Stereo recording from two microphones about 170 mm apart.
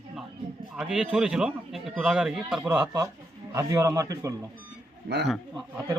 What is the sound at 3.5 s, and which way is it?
Speech, 20° right (ahead or behind).